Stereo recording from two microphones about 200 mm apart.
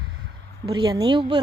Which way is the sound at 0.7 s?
20° right (ahead or behind).